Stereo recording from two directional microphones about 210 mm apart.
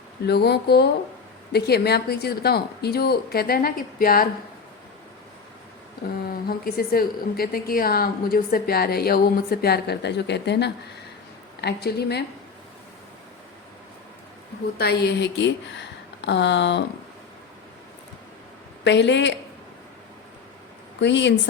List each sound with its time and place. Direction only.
0.3 s a woman's voice: 50° left (ahead or behind)
6.2 s a woman's voice: 45° left (ahead or behind)
14.8 s speech: 50° left (ahead or behind)
18.9 s speech: 55° left (ahead or behind)
21.0 s speech: 60° left (ahead or behind)